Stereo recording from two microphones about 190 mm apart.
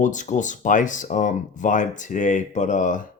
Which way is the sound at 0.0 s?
40° left (ahead or behind).